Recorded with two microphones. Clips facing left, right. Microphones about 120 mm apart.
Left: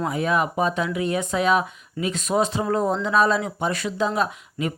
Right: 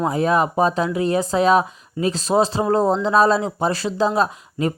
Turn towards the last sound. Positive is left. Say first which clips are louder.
# right 4 dB
turn(degrees=-35)  # may be behind; listen again after turning